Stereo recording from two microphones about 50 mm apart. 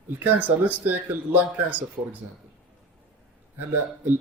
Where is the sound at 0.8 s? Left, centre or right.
Right.